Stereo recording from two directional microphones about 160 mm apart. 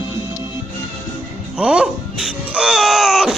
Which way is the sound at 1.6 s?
5° right (ahead or behind).